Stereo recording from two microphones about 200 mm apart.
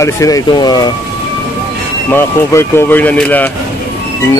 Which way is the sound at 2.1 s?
10° left (ahead or behind).